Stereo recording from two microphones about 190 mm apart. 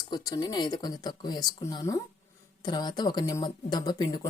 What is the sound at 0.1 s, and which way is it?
Speech, 20° left (ahead or behind).